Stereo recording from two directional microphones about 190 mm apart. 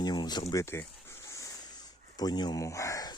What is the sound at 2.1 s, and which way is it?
Speech, 20° left (ahead or behind).